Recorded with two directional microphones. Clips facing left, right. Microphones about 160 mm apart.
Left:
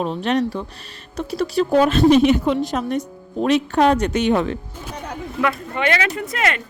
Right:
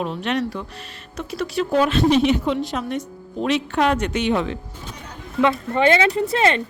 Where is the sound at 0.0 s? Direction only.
35° left (ahead or behind).